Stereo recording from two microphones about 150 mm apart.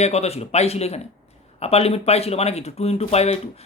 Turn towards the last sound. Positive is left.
turn(degrees=45)  # may be behind; listen again after turning